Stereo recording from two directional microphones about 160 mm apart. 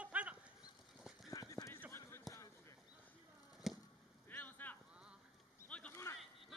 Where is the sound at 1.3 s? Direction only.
20° left (ahead or behind).